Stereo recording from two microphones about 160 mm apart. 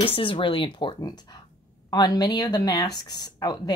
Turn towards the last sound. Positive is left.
turn(degrees=25)  # may be behind; listen again after turning